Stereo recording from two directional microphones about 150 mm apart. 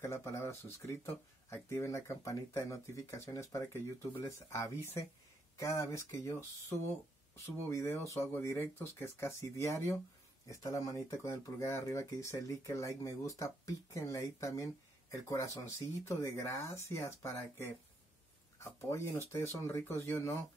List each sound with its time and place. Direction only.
0.0 s speech: 20° left (ahead or behind)
7.7 s speech: 15° left (ahead or behind)